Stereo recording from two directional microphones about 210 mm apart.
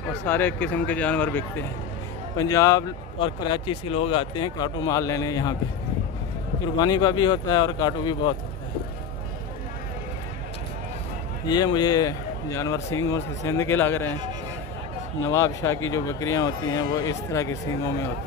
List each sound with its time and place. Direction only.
0.3 s speech: 10° left (ahead or behind)
6.8 s speech: 20° left (ahead or behind)
11.4 s speech: 20° left (ahead or behind)
15.2 s speech: 15° left (ahead or behind)